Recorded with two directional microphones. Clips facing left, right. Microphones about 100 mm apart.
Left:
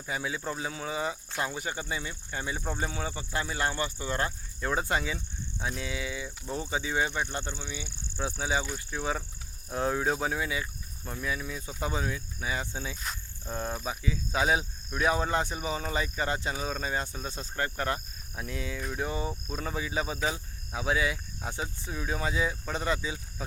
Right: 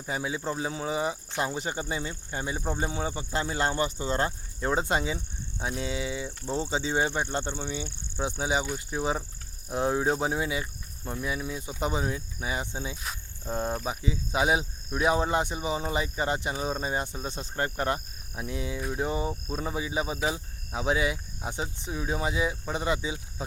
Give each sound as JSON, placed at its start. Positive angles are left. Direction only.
{"t": 0.0, "sound": "speech", "side_deg": -25}
{"t": 2.6, "sound": "speech", "side_deg": -15}
{"t": 7.5, "sound": "speech", "side_deg": -50}
{"t": 8.1, "sound": "speech", "side_deg": -20}